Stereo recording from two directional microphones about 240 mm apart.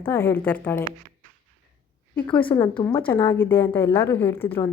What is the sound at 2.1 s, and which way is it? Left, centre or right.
A woman's voice, centre.